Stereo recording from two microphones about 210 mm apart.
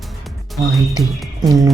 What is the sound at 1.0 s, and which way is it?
Speech, 15° right (ahead or behind).